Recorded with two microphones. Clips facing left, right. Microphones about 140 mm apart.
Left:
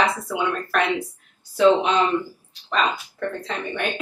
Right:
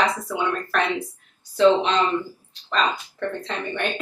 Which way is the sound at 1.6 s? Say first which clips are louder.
Even; 10° left (ahead or behind).